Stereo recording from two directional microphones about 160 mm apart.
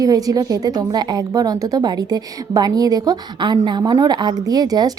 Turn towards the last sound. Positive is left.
turn(degrees=-25)  # may be behind; listen again after turning